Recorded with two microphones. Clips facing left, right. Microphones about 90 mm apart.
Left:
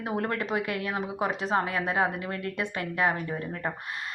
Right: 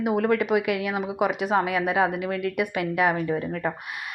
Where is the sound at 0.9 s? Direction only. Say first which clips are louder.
Right 4 dB; 15° right (ahead or behind).